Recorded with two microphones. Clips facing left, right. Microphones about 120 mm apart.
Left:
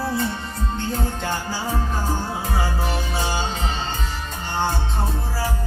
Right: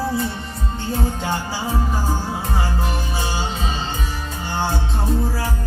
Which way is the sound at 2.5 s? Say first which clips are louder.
Even; centre (ahead or behind).